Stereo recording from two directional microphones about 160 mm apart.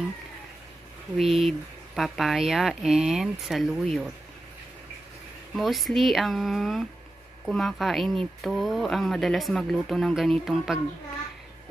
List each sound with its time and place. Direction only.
1.1 s speech: centre (ahead or behind)
5.6 s speech: centre (ahead or behind)